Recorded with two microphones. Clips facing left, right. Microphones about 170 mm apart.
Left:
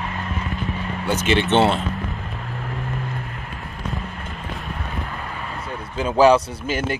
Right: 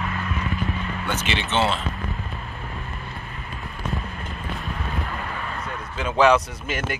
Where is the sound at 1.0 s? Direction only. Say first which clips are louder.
Left 9 dB; 45° left (ahead or behind).